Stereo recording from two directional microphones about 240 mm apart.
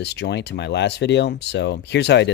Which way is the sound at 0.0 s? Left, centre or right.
Left.